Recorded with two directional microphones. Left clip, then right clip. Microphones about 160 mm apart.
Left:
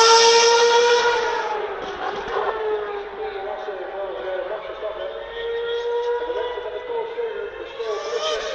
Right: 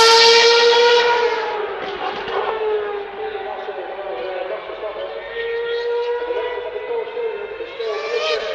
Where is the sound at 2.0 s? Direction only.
50° right (ahead or behind).